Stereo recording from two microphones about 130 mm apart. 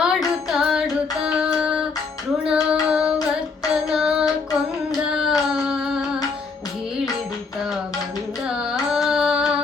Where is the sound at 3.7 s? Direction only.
5° right (ahead or behind).